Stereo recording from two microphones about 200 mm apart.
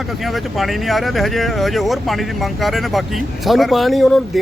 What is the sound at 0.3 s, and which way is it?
Speech, centre (ahead or behind).